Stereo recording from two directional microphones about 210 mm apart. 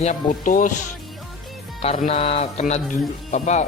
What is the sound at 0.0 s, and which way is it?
Speech, 35° left (ahead or behind).